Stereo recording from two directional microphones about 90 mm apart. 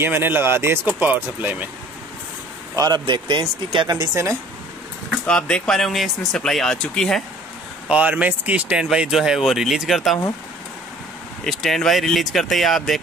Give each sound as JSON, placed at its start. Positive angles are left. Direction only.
{"t": 0.0, "sound": "speech", "side_deg": -25}
{"t": 2.7, "sound": "a man's voice", "side_deg": -45}
{"t": 3.1, "sound": "speech", "side_deg": -60}
{"t": 3.9, "sound": "speech", "side_deg": -40}
{"t": 5.2, "sound": "speech", "side_deg": 10}
{"t": 7.9, "sound": "speech", "side_deg": -15}
{"t": 11.4, "sound": "speech", "side_deg": 0}